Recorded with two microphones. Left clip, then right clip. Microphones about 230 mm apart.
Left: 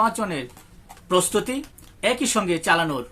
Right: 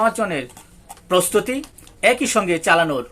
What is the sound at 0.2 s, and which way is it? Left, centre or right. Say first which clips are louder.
Speech: right 5 dB; centre.